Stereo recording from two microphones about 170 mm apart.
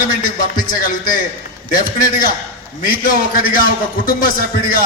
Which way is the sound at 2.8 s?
55° left (ahead or behind).